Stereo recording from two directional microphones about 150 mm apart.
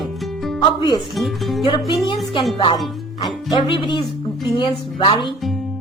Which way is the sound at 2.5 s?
30° left (ahead or behind).